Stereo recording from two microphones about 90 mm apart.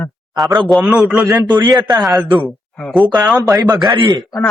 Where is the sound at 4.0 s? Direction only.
70° right (ahead or behind).